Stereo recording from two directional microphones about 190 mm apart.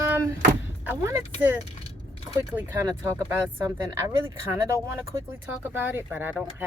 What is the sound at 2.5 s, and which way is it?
Speech, 15° right (ahead or behind).